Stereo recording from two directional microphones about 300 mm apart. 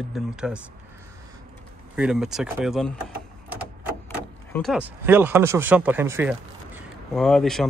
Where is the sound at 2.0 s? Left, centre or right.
Centre.